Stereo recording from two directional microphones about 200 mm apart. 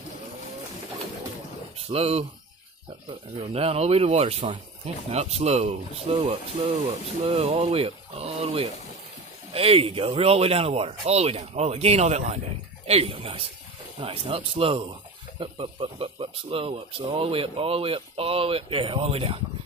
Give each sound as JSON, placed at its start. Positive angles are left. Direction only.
{"t": 1.8, "sound": "speech", "side_deg": -30}